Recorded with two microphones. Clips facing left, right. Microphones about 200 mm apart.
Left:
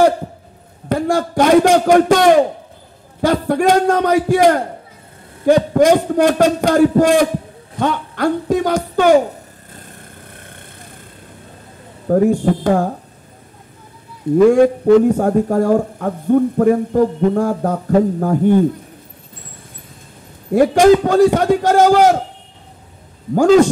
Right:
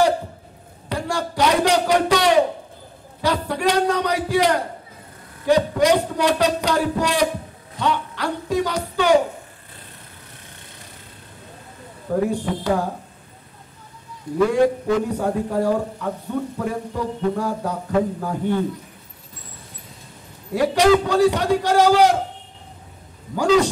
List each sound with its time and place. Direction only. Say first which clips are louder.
0.8 s a sound: left 8 dB; 50° left (ahead or behind)
3.2 s a man's voice: left 7 dB; 50° left (ahead or behind)
12.1 s a man's voice: left 8 dB; 50° left (ahead or behind)
14.5 s a man's voice: left 8 dB; 50° left (ahead or behind)
20.5 s a man's voice: left 6 dB; 50° left (ahead or behind)
23.3 s a man's voice: left 7 dB; 50° left (ahead or behind)